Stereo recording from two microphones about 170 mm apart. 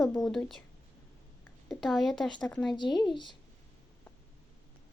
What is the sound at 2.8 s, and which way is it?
Speech, 25° left (ahead or behind).